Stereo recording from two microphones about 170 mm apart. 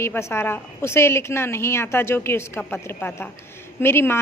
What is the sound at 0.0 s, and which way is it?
A woman's voice, 15° left (ahead or behind).